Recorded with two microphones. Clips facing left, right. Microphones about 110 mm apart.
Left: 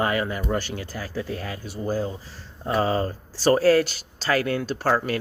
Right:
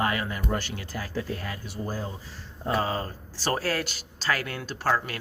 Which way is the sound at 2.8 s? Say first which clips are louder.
Left 6 dB; 35° left (ahead or behind).